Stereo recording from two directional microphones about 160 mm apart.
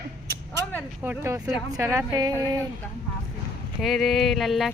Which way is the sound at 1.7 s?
15° right (ahead or behind).